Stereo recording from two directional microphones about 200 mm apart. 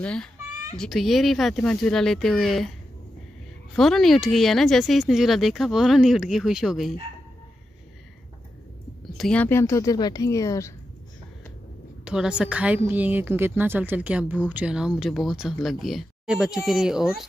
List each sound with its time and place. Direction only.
0.0 s a woman's voice: 5° left (ahead or behind)
3.7 s a woman's voice: centre (ahead or behind)
9.1 s speech: 5° left (ahead or behind)
12.0 s a woman's voice: 5° right (ahead or behind)